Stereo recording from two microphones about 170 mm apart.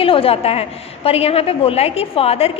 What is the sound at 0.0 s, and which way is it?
A woman's voice, 35° left (ahead or behind).